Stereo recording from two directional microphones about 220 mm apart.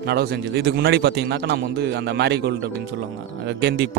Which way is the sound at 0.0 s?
45° right (ahead or behind).